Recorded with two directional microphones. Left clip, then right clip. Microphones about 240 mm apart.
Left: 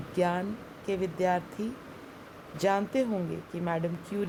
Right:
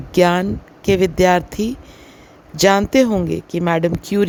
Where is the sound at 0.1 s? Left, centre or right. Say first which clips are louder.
Right 14 dB; right.